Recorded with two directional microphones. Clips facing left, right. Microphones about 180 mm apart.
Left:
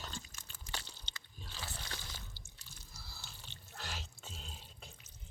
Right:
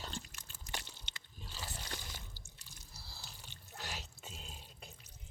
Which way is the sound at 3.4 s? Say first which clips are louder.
Even; 15° right (ahead or behind).